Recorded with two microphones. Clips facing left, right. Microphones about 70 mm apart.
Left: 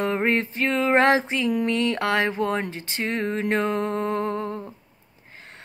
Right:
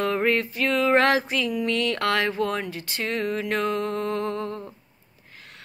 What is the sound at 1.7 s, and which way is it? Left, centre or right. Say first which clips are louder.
Female singing: left 1 dB; left.